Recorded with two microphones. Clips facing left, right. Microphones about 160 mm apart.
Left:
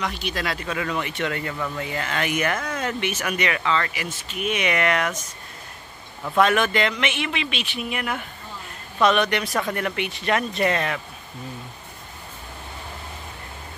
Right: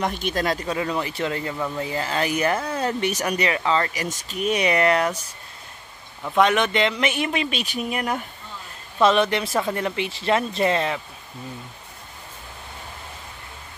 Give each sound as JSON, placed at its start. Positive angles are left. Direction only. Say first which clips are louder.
{"t": 0.0, "sound": "speech", "louder": "right 4 dB", "side_deg": -50}
{"t": 6.3, "sound": "speech", "louder": "even", "side_deg": -20}
{"t": 7.0, "sound": "speech", "louder": "right 3 dB", "side_deg": -35}